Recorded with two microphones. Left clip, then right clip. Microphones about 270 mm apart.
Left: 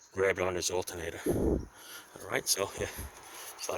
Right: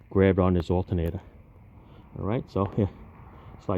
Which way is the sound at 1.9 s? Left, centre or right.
Left.